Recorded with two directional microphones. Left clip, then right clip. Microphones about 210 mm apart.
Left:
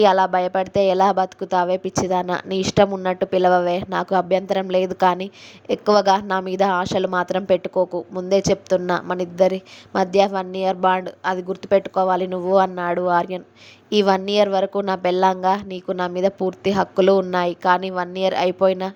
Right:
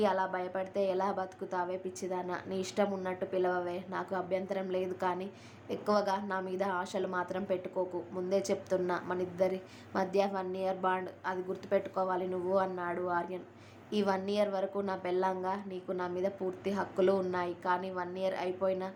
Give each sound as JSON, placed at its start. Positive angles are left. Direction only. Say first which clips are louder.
{"t": 0.0, "sound": "a woman's voice", "louder": "left 16 dB", "side_deg": 40}